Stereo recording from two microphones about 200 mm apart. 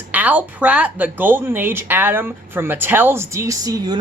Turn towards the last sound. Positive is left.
turn(degrees=-20)  # may be behind; listen again after turning